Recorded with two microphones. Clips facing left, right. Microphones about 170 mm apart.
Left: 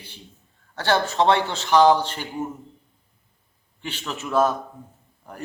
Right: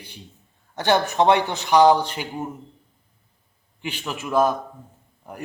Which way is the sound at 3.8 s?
10° right (ahead or behind).